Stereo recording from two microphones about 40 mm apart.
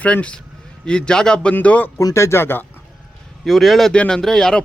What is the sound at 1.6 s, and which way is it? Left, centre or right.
Speech, left.